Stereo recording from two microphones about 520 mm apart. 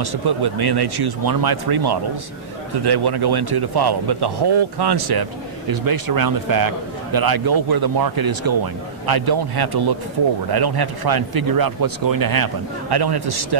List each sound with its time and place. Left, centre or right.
0.0 s a man's voice: right